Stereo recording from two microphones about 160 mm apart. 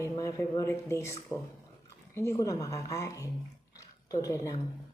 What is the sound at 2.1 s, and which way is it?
A woman's voice, 20° left (ahead or behind).